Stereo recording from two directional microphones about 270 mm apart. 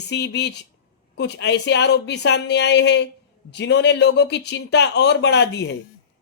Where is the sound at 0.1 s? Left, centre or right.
Left.